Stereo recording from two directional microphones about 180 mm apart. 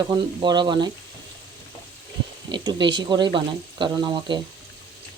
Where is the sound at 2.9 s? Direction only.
25° right (ahead or behind).